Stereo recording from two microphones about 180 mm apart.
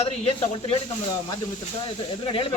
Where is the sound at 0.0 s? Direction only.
35° left (ahead or behind).